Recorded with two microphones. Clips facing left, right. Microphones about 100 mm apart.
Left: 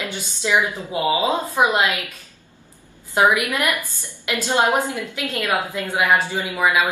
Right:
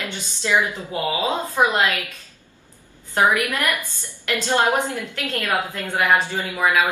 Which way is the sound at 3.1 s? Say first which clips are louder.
Left 1 dB; 15° left (ahead or behind).